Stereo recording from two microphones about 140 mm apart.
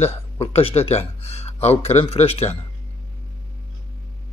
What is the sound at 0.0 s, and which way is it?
Speech, 45° left (ahead or behind).